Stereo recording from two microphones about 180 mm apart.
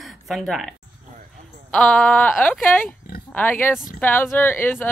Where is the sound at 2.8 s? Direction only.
55° left (ahead or behind).